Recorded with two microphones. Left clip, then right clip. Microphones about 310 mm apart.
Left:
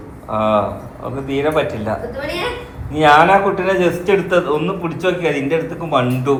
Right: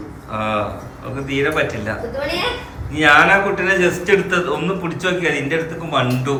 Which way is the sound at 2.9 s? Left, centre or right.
Centre.